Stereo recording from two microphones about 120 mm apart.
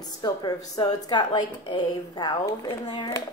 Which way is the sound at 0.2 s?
35° left (ahead or behind).